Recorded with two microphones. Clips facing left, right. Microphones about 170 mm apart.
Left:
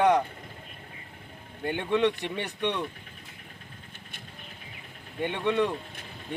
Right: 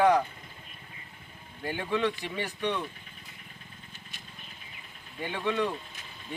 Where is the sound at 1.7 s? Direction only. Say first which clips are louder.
Left 4 dB; 5° right (ahead or behind).